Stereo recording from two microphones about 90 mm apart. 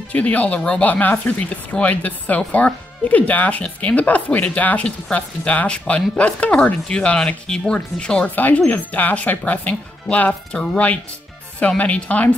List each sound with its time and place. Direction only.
0.1 s speech: 15° left (ahead or behind)